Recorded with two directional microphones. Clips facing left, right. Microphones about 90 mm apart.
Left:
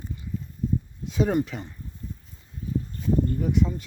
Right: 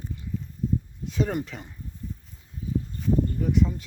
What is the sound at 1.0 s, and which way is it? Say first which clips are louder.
Speech: left 2 dB; 15° left (ahead or behind).